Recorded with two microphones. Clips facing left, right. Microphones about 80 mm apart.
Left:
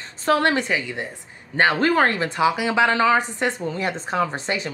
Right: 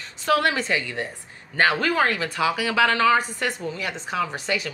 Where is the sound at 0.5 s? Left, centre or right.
Centre.